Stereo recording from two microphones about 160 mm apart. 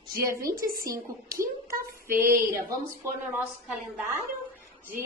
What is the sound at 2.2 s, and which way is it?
Speech, 15° right (ahead or behind).